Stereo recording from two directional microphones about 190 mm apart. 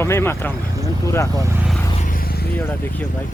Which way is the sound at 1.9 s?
45° left (ahead or behind).